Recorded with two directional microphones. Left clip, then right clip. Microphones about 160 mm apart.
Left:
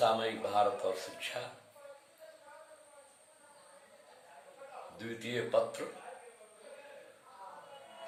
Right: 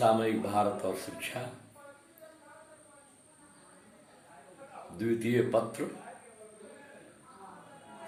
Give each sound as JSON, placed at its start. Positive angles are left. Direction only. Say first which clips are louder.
{"t": 0.2, "sound": "speech", "louder": "right 2 dB", "side_deg": 15}
{"t": 4.9, "sound": "speech", "louder": "right 9 dB", "side_deg": 15}